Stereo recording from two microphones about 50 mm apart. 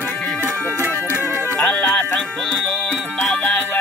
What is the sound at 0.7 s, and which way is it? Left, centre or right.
Music, right.